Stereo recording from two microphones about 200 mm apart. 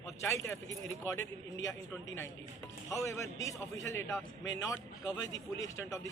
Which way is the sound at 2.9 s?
15° left (ahead or behind).